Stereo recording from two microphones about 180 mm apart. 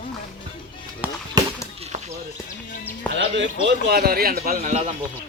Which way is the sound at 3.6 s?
60° right (ahead or behind).